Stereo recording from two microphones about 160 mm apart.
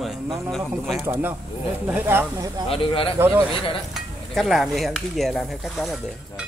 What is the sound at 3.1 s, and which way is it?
Speech, 10° right (ahead or behind).